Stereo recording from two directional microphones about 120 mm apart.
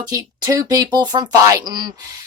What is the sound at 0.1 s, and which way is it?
Speech, 30° right (ahead or behind).